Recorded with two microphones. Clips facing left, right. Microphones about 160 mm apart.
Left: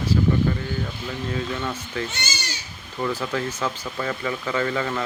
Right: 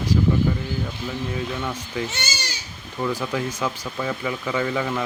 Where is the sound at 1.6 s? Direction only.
10° right (ahead or behind).